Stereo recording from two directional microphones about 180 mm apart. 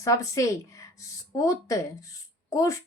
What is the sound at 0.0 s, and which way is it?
Speech, 15° left (ahead or behind).